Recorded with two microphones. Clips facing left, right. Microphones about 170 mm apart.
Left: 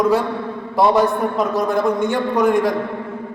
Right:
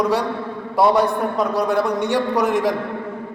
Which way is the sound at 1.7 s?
70° right (ahead or behind).